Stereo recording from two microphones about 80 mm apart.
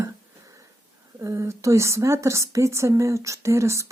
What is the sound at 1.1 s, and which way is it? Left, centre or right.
Speech, right.